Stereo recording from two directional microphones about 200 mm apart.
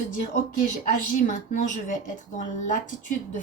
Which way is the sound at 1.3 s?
40° left (ahead or behind).